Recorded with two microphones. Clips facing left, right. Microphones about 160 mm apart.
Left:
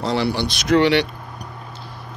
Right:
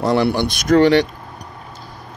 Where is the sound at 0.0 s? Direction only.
55° right (ahead or behind).